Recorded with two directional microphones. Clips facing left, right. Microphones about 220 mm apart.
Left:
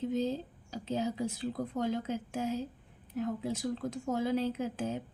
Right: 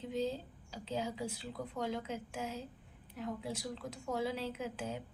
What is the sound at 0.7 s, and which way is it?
Speech, 45° left (ahead or behind).